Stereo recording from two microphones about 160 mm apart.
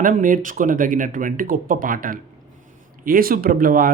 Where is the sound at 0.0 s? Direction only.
55° right (ahead or behind).